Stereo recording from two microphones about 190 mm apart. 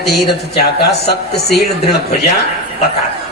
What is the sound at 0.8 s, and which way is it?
A man's voice, 60° left (ahead or behind).